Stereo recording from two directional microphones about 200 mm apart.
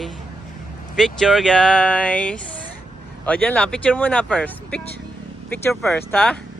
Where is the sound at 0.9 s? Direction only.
Centre (ahead or behind).